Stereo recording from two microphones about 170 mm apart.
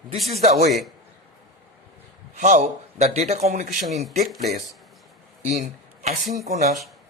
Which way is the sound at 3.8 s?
Centre (ahead or behind).